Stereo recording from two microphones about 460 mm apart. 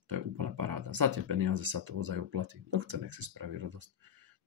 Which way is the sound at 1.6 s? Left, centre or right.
Right.